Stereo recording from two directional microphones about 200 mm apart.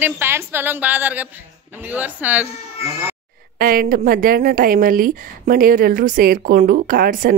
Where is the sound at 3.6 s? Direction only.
45° right (ahead or behind).